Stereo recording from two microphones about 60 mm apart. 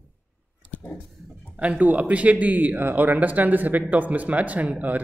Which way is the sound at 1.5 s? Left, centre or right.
Right.